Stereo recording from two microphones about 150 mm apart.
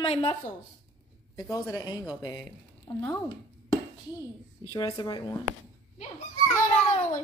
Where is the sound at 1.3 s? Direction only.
20° left (ahead or behind).